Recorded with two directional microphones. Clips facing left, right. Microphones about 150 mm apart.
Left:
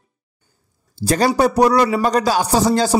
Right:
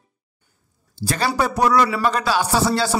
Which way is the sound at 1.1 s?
40° left (ahead or behind).